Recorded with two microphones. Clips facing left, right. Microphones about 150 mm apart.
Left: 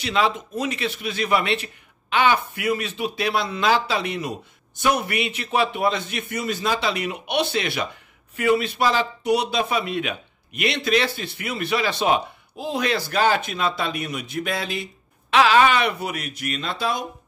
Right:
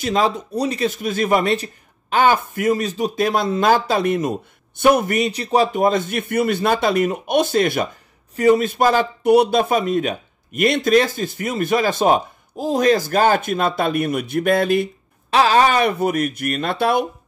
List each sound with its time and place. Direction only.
0.0 s speech: 40° right (ahead or behind)
15.3 s speech: 35° right (ahead or behind); by 17.0 s 60° right (ahead or behind)